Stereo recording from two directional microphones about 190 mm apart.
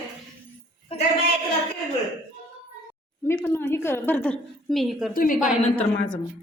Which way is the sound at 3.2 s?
15° left (ahead or behind).